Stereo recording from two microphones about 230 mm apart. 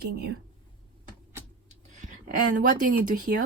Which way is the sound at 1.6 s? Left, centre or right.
Right.